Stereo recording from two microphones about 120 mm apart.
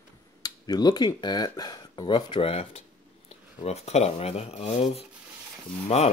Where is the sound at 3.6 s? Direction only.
65° left (ahead or behind).